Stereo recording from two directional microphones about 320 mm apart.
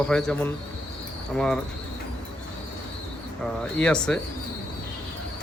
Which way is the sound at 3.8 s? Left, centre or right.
Centre.